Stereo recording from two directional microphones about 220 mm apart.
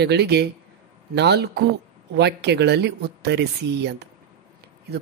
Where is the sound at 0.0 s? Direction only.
50° right (ahead or behind).